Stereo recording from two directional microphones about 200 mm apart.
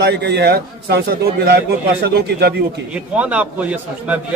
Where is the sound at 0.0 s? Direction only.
55° right (ahead or behind).